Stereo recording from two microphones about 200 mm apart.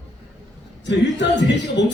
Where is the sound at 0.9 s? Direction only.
60° left (ahead or behind).